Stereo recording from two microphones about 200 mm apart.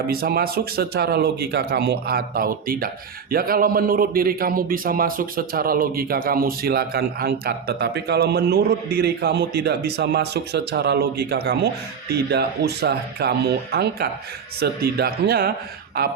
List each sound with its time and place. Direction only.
0.1 s speech: 50° right (ahead or behind)